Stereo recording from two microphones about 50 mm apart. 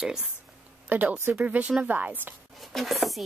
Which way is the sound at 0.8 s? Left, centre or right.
Right.